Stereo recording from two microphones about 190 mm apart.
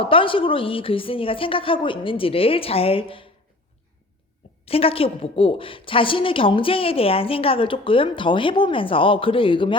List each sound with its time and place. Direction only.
0.0 s a woman's voice: 30° left (ahead or behind)
4.6 s a woman's voice: 30° left (ahead or behind)